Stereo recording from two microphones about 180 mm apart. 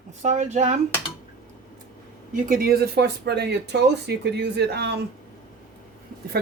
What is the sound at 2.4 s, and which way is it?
Speech, 55° right (ahead or behind).